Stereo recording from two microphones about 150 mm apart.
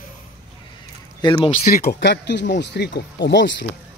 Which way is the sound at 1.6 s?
90° left.